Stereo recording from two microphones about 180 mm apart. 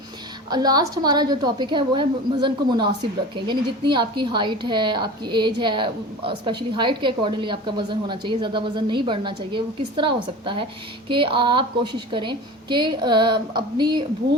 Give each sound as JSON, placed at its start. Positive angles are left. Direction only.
{"t": 0.5, "sound": "a woman's voice", "side_deg": -20}